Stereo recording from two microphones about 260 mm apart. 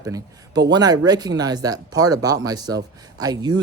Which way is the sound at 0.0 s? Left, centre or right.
Centre.